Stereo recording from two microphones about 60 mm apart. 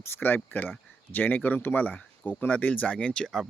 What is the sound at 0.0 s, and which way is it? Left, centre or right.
Speech, left.